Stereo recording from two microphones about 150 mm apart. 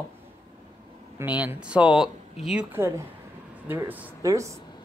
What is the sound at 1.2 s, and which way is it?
Speech, 10° right (ahead or behind).